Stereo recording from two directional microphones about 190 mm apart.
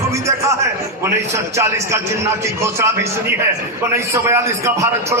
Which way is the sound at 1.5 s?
15° right (ahead or behind).